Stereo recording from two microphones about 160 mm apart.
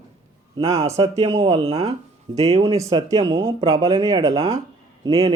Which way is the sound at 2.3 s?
40° right (ahead or behind).